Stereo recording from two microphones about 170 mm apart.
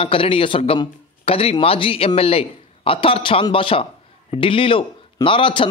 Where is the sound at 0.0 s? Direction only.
30° left (ahead or behind).